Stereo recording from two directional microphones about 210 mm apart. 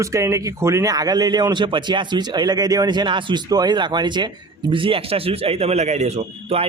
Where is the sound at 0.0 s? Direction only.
15° right (ahead or behind).